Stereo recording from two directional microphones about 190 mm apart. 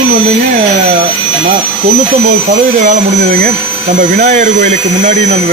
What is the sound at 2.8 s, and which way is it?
Speech, 45° right (ahead or behind).